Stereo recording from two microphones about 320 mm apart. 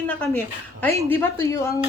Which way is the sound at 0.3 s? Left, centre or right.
Centre.